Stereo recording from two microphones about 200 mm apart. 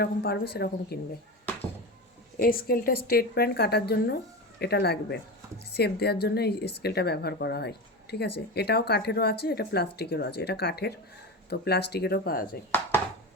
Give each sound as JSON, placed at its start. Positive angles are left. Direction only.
{"t": 0.0, "sound": "a woman's voice", "side_deg": 55}
{"t": 2.4, "sound": "a woman's voice", "side_deg": 45}